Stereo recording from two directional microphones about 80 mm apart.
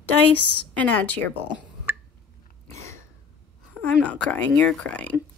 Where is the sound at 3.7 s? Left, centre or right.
Centre.